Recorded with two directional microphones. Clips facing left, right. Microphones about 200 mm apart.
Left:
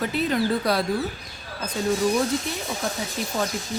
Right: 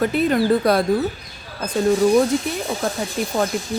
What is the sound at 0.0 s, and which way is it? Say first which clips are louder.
Speech: right 6 dB; 55° right (ahead or behind).